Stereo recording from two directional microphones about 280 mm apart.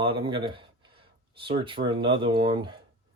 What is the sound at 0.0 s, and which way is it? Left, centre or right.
Speech, centre.